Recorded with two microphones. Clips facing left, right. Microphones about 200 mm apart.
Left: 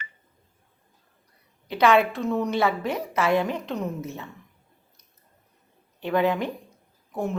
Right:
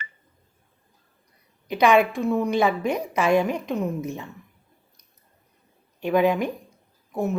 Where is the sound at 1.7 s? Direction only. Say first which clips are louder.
Right 1 dB; 15° right (ahead or behind).